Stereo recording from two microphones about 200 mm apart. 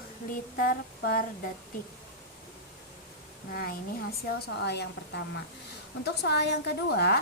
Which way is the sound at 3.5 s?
50° left (ahead or behind).